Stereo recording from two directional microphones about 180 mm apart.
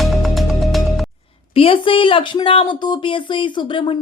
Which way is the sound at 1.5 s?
30° left (ahead or behind).